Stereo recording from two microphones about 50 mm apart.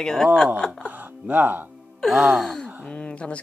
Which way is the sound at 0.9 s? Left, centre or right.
Right.